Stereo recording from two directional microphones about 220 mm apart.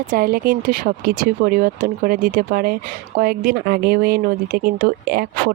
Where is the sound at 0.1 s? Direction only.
40° right (ahead or behind).